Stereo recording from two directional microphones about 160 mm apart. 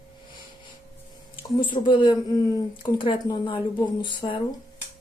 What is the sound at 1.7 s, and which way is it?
Speech, 30° left (ahead or behind).